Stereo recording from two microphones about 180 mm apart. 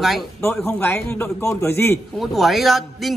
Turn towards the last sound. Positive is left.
turn(degrees=0)  # may be behind; listen again after turning